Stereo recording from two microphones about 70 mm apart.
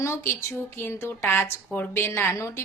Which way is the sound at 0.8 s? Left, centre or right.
Left.